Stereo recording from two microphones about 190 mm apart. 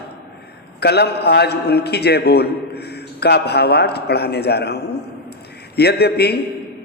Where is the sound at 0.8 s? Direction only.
60° left (ahead or behind).